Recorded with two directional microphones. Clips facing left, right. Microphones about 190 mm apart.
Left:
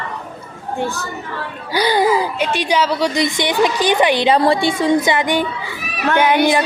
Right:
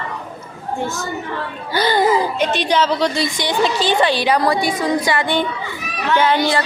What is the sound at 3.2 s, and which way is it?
A woman's voice, 20° left (ahead or behind).